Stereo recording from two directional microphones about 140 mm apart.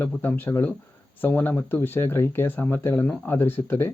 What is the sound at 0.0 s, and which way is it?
Speech, 15° left (ahead or behind).